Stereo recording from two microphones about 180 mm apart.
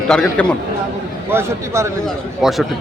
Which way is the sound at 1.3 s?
15° right (ahead or behind).